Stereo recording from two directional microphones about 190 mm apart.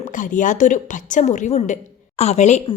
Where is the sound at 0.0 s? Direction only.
45° left (ahead or behind).